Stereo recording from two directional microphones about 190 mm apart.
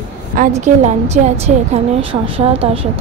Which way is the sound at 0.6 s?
35° right (ahead or behind).